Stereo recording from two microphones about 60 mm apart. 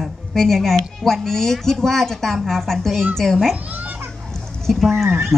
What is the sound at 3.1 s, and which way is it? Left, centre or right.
Speech, centre.